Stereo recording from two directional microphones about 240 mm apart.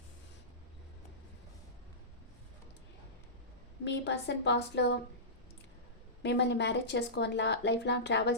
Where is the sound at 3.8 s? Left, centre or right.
Left.